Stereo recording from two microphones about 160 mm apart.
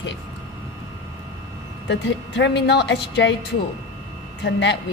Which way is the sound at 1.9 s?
90° left.